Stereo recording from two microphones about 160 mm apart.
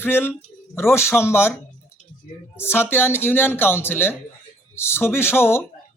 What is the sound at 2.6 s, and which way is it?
Speech, 15° left (ahead or behind).